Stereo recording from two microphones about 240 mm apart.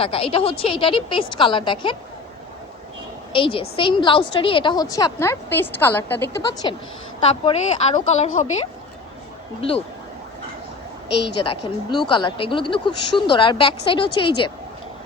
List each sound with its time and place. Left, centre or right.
0.0 s speech: left
3.3 s speech: left
11.3 s speech: centre